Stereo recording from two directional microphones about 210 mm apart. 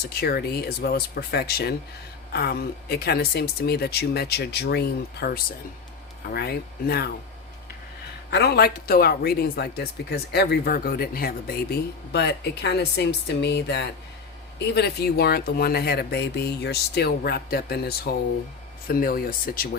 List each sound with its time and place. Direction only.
0.0 s speech: 50° left (ahead or behind)
8.3 s speech: 55° left (ahead or behind)